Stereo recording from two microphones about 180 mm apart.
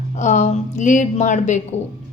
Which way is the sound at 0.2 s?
40° left (ahead or behind).